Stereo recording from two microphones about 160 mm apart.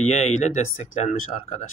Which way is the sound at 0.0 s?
50° left (ahead or behind).